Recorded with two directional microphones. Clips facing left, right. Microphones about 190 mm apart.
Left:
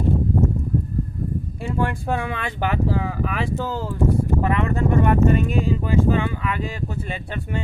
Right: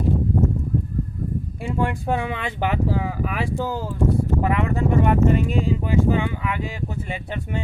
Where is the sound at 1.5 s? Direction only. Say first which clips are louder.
Even; 15° right (ahead or behind).